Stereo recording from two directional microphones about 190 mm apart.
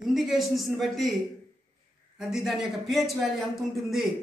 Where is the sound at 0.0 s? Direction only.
Centre (ahead or behind).